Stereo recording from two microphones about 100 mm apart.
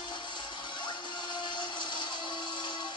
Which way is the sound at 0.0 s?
50° left (ahead or behind).